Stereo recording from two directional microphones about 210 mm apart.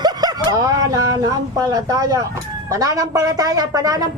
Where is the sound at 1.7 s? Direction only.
15° right (ahead or behind).